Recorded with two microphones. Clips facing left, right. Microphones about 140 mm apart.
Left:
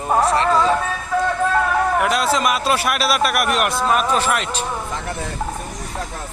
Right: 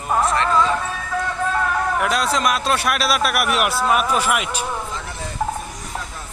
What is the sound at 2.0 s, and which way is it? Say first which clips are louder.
A man's voice: left 2 dB; centre (ahead or behind).